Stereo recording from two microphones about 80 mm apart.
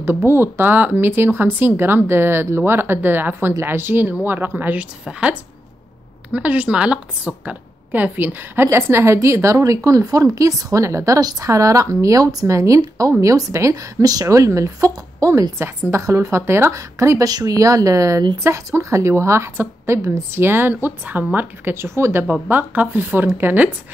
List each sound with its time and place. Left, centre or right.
0.0 s a woman's voice: right
22.3 s speech: right